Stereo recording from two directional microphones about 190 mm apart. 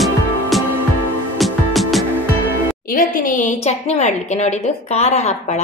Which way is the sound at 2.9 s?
45° left (ahead or behind).